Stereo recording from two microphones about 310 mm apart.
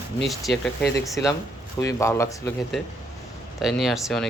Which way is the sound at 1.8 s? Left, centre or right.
Centre.